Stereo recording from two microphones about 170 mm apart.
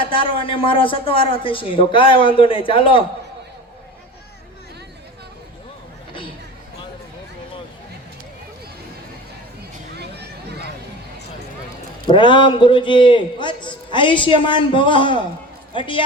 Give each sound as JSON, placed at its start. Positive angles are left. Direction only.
{"t": 0.0, "sound": "speech", "side_deg": 30}
{"t": 10.0, "sound": "a sound", "side_deg": -75}
{"t": 12.1, "sound": "a man's voice", "side_deg": 30}